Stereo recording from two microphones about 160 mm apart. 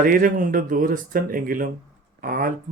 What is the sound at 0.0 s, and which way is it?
Speech, 60° right (ahead or behind).